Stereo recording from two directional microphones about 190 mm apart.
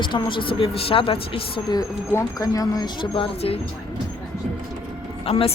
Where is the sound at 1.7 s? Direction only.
20° left (ahead or behind).